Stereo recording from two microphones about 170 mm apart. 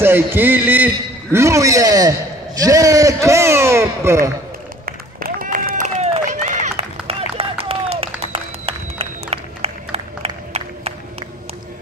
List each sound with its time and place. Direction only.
0.0 s a man's voice: 15° right (ahead or behind)
4.8 s run: 55° right (ahead or behind); by 10.9 s 35° right (ahead or behind)